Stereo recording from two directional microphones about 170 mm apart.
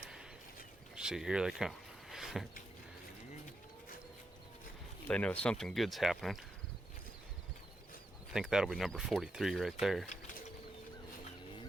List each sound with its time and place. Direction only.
0.9 s speech: 5° right (ahead or behind)
5.0 s speech: 5° left (ahead or behind)
8.3 s speech: 5° right (ahead or behind)